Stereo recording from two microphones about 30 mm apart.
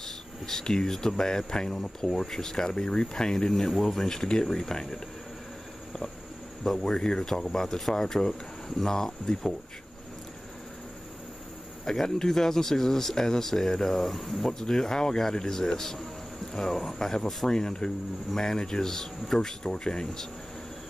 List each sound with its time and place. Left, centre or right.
0.0 s speech: centre
6.6 s speech: centre
11.8 s speech: centre